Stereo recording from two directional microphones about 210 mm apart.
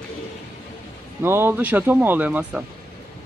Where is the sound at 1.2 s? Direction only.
10° right (ahead or behind).